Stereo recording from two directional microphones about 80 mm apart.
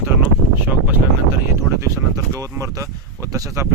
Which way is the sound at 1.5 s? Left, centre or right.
Right.